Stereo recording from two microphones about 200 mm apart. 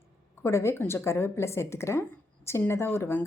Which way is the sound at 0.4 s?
15° left (ahead or behind).